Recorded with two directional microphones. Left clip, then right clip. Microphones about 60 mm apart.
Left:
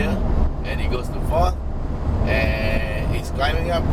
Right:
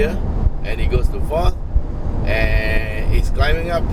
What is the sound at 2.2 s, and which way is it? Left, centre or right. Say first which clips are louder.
Speech: right 2 dB; right.